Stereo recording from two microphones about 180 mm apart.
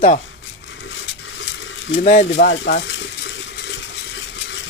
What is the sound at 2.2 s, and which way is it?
Stir, 85° left.